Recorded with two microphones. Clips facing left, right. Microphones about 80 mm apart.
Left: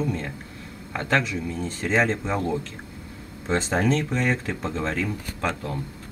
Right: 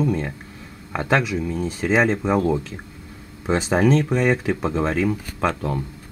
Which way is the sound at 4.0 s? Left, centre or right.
Right.